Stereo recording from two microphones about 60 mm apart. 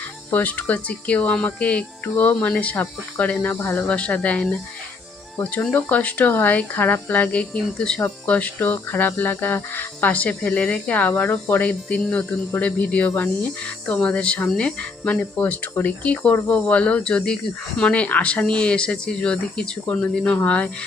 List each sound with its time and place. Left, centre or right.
0.3 s speech: left
5.7 s speech: left